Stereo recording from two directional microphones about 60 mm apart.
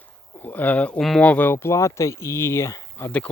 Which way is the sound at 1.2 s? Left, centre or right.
Left.